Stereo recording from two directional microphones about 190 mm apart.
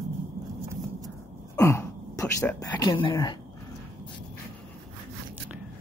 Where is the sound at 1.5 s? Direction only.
15° left (ahead or behind).